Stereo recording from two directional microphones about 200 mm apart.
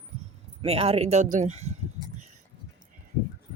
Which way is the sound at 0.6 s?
30° right (ahead or behind).